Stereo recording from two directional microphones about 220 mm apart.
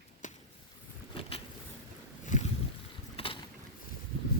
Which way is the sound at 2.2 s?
35° left (ahead or behind).